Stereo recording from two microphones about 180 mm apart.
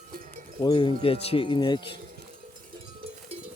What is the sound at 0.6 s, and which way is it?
Speech, 25° left (ahead or behind).